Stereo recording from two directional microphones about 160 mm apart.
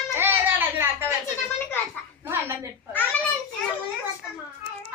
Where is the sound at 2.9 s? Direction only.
10° left (ahead or behind).